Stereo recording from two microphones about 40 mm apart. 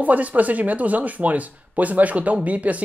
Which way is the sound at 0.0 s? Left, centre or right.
Right.